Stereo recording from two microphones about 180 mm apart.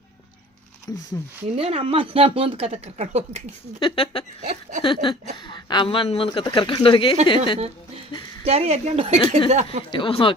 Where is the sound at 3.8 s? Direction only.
30° left (ahead or behind).